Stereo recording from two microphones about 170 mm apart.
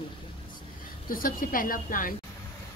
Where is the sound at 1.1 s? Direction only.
55° left (ahead or behind).